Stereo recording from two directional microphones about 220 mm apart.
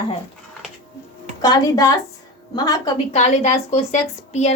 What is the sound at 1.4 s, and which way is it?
A woman's voice, 15° left (ahead or behind).